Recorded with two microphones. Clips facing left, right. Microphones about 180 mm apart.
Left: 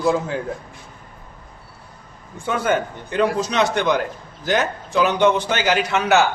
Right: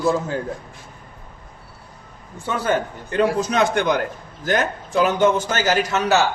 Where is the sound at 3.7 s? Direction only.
50° right (ahead or behind).